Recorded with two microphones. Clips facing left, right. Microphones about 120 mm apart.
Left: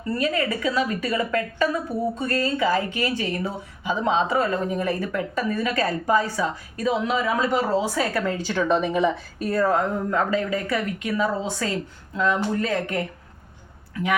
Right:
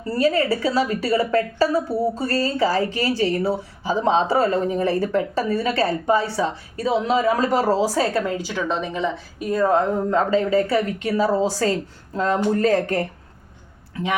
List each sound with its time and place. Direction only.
0.0 s speech: 30° right (ahead or behind)
8.3 s a woman's voice: 10° right (ahead or behind)
8.6 s speech: 5° left (ahead or behind)
9.4 s speech: 20° right (ahead or behind); by 13.1 s 35° right (ahead or behind)
13.9 s speech: 25° right (ahead or behind)